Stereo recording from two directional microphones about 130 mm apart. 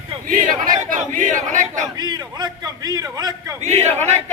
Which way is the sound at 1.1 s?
75° right (ahead or behind).